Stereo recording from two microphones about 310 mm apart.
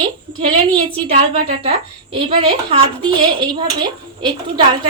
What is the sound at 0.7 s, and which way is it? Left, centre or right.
Speech, centre.